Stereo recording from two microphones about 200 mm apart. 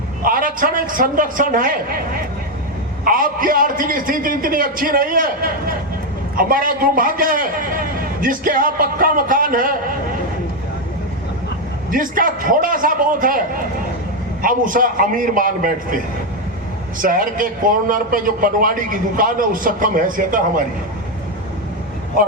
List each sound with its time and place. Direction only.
0.3 s a man's voice: 45° right (ahead or behind)
11.9 s a man's voice: 45° right (ahead or behind)
14.4 s a man's voice: 45° right (ahead or behind)